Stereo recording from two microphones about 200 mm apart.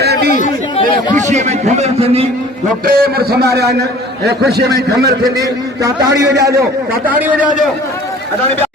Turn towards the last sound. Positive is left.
turn(degrees=-10)  # may be behind; listen again after turning